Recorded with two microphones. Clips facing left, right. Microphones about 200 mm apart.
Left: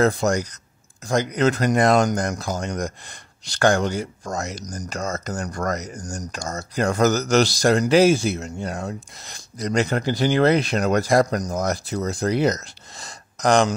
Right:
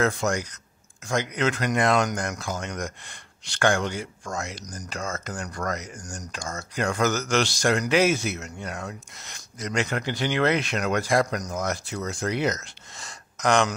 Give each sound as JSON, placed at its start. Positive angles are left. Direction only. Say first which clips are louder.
{"t": 0.0, "sound": "speech", "louder": "left 5 dB", "side_deg": 35}